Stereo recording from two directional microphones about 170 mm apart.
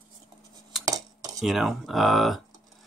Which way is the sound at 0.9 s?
20° right (ahead or behind).